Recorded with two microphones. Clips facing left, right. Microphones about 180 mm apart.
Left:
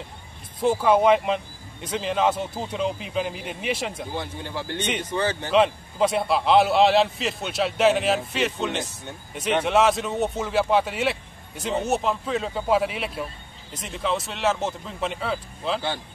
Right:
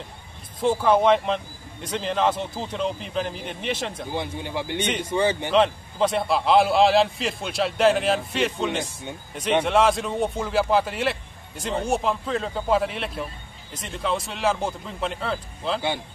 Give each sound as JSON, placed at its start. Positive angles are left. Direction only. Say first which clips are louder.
{"t": 0.6, "sound": "a man's voice", "louder": "even", "side_deg": 10}
{"t": 4.1, "sound": "speech", "louder": "right 2 dB", "side_deg": -15}
{"t": 5.5, "sound": "a man's voice", "louder": "even", "side_deg": 5}